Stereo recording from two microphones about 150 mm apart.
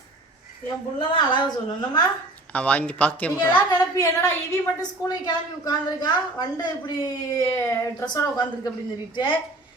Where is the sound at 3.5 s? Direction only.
25° left (ahead or behind).